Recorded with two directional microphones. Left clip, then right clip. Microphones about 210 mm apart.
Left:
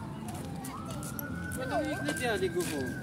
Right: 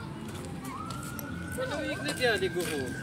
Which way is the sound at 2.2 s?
40° left (ahead or behind).